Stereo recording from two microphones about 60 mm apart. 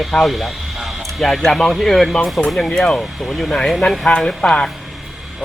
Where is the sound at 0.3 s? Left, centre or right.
Centre.